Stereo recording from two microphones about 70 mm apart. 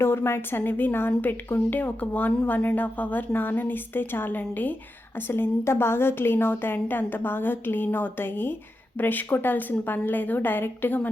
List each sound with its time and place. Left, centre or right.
0.0 s a woman's voice: left